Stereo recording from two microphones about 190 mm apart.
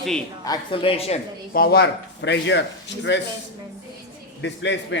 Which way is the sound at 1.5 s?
55° left (ahead or behind).